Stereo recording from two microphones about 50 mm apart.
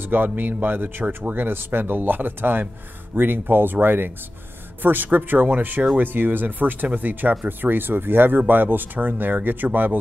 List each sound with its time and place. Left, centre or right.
0.0 s speech: right